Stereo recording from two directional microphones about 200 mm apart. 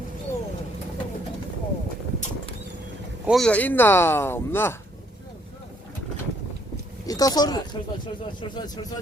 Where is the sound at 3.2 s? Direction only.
Centre (ahead or behind).